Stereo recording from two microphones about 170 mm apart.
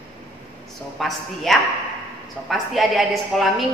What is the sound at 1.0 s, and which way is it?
A woman's voice, centre (ahead or behind).